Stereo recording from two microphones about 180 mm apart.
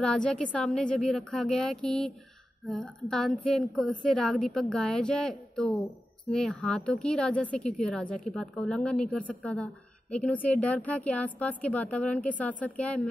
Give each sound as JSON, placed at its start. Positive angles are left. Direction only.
{"t": 0.0, "sound": "speech", "side_deg": 5}